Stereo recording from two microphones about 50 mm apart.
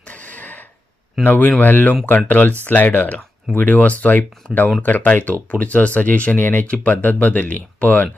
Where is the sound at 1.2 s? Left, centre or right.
Left.